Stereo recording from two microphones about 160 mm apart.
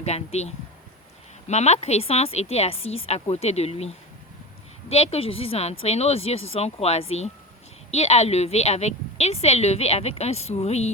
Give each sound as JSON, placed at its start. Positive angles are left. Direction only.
{"t": 0.0, "sound": "a woman's voice", "side_deg": 45}